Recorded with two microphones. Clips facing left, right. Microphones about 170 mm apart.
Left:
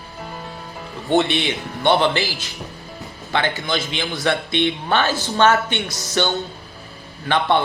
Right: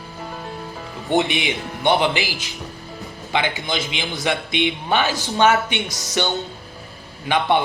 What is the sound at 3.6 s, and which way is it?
A man's voice, 15° right (ahead or behind).